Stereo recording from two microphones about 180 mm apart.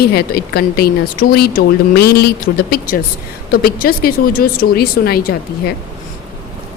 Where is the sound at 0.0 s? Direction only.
60° left (ahead or behind).